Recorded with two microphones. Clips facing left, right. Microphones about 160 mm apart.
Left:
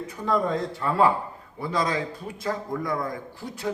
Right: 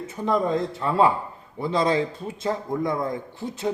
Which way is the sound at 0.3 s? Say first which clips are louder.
Right 2 dB; 20° right (ahead or behind).